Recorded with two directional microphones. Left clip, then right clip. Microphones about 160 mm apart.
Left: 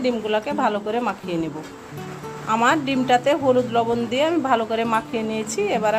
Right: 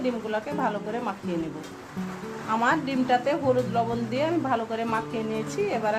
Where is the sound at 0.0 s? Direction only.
45° left (ahead or behind).